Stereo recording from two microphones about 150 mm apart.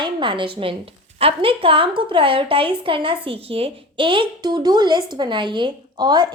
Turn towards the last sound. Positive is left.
turn(degrees=-30)  # may be behind; listen again after turning